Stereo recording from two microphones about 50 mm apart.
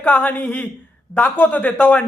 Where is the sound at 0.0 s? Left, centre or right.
Left.